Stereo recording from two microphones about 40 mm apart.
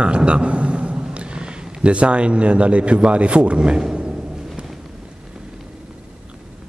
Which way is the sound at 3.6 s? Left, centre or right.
Centre.